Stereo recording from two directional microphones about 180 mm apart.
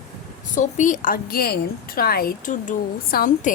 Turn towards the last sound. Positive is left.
turn(degrees=50)  # may be behind; listen again after turning